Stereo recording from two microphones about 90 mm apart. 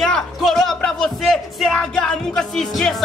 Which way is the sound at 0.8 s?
10° left (ahead or behind).